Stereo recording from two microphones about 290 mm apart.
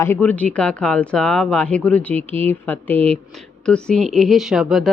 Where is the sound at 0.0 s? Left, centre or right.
Centre.